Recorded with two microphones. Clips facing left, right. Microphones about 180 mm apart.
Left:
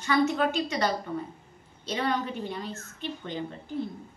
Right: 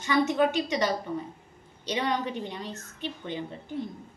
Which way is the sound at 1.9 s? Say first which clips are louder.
Even; 15° right (ahead or behind).